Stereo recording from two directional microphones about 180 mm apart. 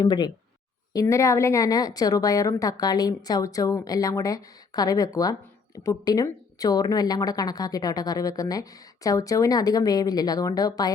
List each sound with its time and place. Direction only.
0.0 s a woman's voice: 25° left (ahead or behind)